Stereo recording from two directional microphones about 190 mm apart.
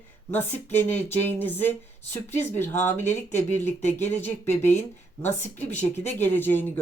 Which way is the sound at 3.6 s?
35° left (ahead or behind).